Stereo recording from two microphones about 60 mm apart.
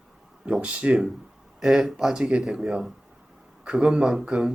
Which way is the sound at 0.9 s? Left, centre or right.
Centre.